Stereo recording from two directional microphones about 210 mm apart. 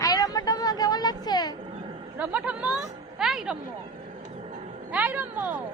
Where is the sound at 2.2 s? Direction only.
5° right (ahead or behind).